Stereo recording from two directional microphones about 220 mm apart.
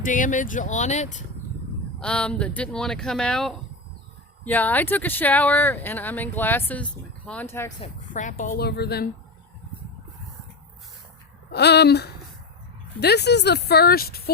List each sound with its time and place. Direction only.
0.0 s speech: 35° left (ahead or behind)
2.0 s speech: 5° left (ahead or behind)
7.8 s speech: 35° left (ahead or behind)
11.5 s speech: 50° left (ahead or behind)